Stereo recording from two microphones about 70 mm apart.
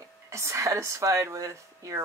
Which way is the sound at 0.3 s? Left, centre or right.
Right.